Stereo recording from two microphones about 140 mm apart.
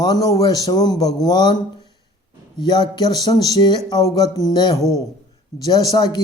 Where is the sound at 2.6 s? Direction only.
30° left (ahead or behind).